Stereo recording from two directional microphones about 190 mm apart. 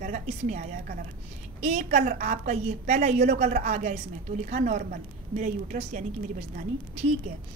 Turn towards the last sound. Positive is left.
turn(degrees=-40)  # may be behind; listen again after turning